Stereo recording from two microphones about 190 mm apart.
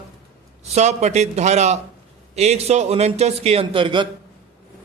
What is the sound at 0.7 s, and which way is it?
Speech, 35° right (ahead or behind).